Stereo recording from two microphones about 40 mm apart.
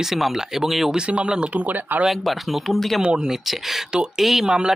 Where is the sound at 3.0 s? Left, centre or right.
Centre.